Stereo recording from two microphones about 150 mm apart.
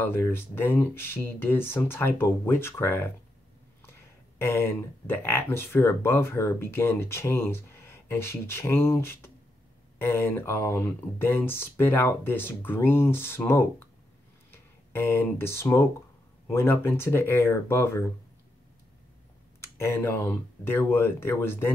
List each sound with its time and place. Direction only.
0.0 s speech: 15° left (ahead or behind)
4.4 s speech: 15° left (ahead or behind)
19.6 s speech: 15° left (ahead or behind)